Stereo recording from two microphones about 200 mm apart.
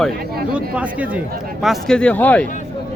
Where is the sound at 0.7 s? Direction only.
5° right (ahead or behind); by 2.5 s 10° left (ahead or behind).